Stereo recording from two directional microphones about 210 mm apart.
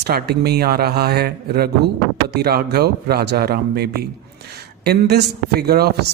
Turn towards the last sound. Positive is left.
turn(degrees=-50)  # may be behind; listen again after turning